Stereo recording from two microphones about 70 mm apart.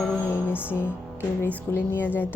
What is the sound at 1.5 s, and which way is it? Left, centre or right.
Speech, left.